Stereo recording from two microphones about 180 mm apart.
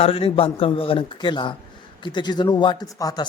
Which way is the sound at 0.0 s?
30° left (ahead or behind).